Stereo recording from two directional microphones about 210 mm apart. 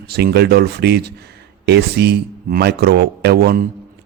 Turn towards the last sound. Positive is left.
turn(degrees=-50)  # may be behind; listen again after turning